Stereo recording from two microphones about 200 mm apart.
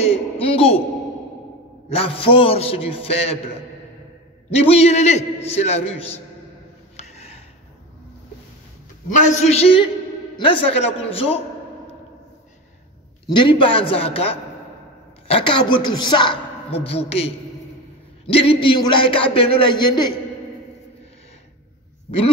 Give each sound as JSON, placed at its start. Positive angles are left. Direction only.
{"t": 0.0, "sound": "a sound", "side_deg": 30}
{"t": 1.9, "sound": "a man's voice", "side_deg": 30}
{"t": 4.6, "sound": "a man's voice", "side_deg": 30}
{"t": 7.0, "sound": "a sound", "side_deg": 30}
{"t": 9.1, "sound": "a man's voice", "side_deg": 35}
{"t": 13.3, "sound": "a man's voice", "side_deg": 25}
{"t": 18.2, "sound": "a man's voice", "side_deg": 30}